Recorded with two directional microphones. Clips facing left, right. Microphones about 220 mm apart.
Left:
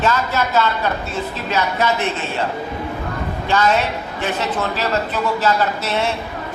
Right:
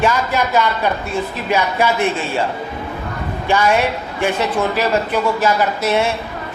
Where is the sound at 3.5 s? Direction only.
10° right (ahead or behind).